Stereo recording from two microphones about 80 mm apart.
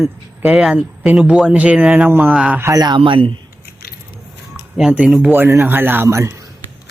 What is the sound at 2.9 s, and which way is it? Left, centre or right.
Speech, right.